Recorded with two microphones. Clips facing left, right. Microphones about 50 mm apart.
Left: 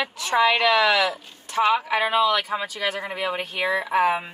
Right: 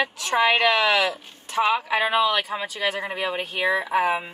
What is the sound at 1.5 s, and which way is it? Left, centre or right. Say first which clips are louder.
Speech: left 1 dB; centre.